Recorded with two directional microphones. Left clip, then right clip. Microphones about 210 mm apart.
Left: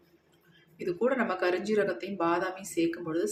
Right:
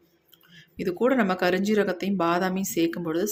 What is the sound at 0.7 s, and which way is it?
Speech, 40° right (ahead or behind).